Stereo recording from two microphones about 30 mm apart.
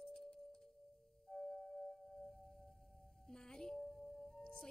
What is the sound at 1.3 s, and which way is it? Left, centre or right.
Singing bowl, left.